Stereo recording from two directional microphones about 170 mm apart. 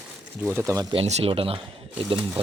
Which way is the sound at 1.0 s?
40° right (ahead or behind).